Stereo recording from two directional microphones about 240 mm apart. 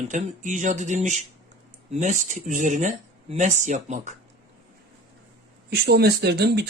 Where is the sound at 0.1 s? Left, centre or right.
Right.